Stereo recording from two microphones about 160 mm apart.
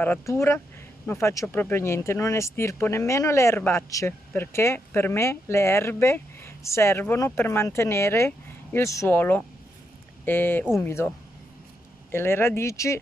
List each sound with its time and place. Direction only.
0.0 s speech: 15° left (ahead or behind)